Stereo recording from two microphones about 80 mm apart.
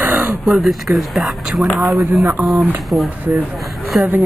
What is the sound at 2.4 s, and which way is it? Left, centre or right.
Speech, right.